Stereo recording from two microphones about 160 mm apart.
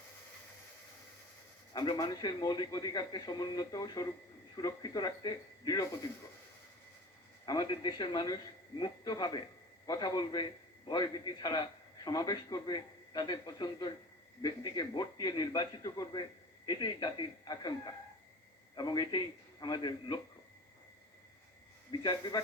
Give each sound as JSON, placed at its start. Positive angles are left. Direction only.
{"t": 1.7, "sound": "a man's voice", "side_deg": 25}
{"t": 7.4, "sound": "a man's voice", "side_deg": 30}
{"t": 18.8, "sound": "a man's voice", "side_deg": 25}
{"t": 22.0, "sound": "a man's voice", "side_deg": 25}